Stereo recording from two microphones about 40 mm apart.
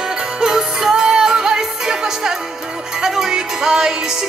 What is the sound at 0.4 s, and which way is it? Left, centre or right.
Music, centre.